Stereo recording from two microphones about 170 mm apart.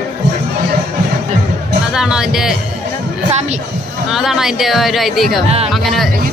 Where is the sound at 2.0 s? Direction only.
5° right (ahead or behind).